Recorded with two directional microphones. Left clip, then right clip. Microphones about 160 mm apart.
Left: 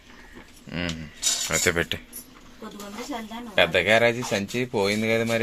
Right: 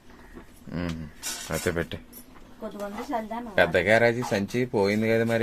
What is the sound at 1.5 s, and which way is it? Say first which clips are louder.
Speech: left 3 dB; 5° right (ahead or behind).